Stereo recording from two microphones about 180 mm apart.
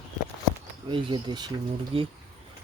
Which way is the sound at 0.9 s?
25° right (ahead or behind).